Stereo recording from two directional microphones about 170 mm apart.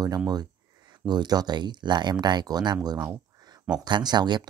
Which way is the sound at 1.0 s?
25° right (ahead or behind).